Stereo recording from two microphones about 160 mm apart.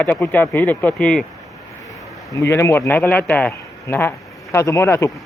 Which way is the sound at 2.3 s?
15° left (ahead or behind).